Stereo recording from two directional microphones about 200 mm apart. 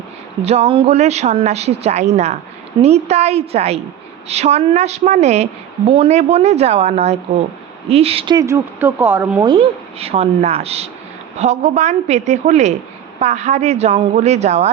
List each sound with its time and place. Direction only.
0.4 s speech: 30° right (ahead or behind); by 9.4 s 10° right (ahead or behind)
9.4 s speech: 25° right (ahead or behind)